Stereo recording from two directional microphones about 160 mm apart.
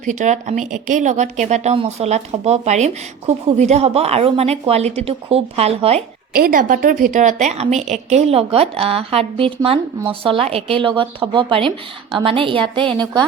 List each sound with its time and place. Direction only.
0.0 s a woman's voice: 50° right (ahead or behind)
6.3 s a woman's voice: 60° right (ahead or behind); by 12.9 s 30° right (ahead or behind)